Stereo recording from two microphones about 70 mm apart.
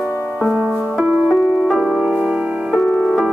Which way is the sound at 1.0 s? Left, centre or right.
Right.